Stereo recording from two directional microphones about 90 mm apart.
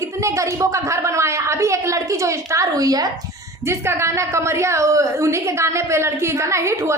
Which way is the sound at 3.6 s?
30° right (ahead or behind).